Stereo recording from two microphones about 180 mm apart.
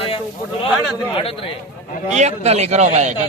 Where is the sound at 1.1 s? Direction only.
30° left (ahead or behind).